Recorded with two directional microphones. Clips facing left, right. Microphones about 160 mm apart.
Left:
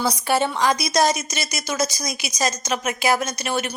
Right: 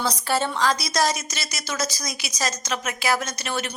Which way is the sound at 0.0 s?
15° left (ahead or behind).